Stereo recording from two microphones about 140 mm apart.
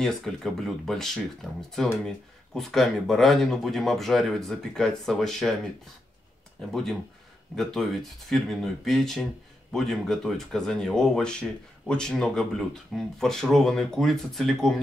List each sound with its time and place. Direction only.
0.0 s speech: 5° left (ahead or behind)
6.7 s speech: centre (ahead or behind)